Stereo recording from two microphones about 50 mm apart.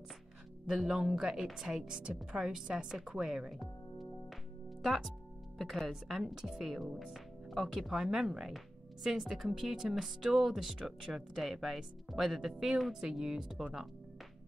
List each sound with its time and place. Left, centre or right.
0.7 s a woman's voice: centre
4.8 s speech: centre